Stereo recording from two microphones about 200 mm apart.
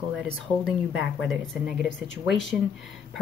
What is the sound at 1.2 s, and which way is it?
Speech, 5° right (ahead or behind).